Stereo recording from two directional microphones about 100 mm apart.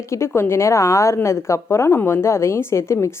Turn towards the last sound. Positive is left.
turn(degrees=25)  # may be behind; listen again after turning